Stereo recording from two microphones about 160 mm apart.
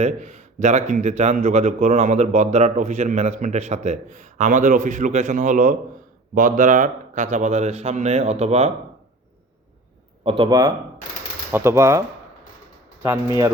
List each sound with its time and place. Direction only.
0.0 s speech: 45° right (ahead or behind)
10.2 s a man's voice: 30° right (ahead or behind)